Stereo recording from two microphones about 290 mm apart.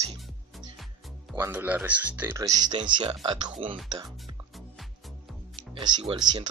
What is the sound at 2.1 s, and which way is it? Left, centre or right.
Speech, centre.